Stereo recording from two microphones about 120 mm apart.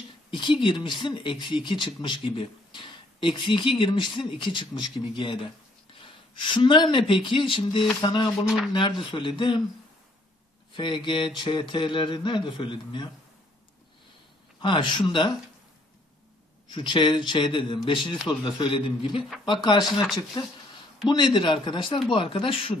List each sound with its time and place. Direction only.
0.3 s speech: 45° left (ahead or behind)
8.5 s speech: 5° right (ahead or behind)
9.1 s speech: 40° left (ahead or behind)
10.8 s speech: 45° left (ahead or behind)
14.6 s speech: 45° left (ahead or behind)
16.6 s speech: 40° left (ahead or behind)
19.9 s speech: centre (ahead or behind)
21.1 s speech: 40° left (ahead or behind)